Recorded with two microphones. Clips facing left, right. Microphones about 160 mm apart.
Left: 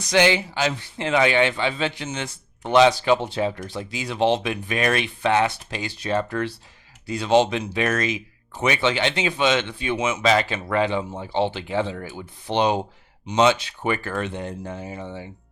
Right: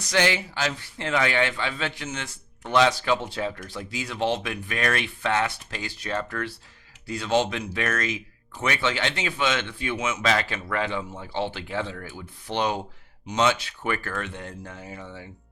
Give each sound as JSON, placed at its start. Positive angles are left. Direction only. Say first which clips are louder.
{"t": 0.0, "sound": "speech", "louder": "left 5 dB", "side_deg": 20}